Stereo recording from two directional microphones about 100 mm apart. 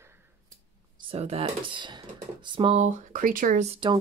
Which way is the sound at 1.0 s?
85° right.